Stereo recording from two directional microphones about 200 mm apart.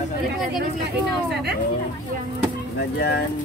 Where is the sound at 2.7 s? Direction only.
55° left (ahead or behind).